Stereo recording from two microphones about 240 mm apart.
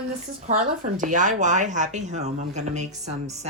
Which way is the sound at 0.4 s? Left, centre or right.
Right.